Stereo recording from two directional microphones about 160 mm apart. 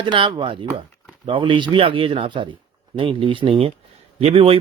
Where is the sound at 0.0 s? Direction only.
30° right (ahead or behind).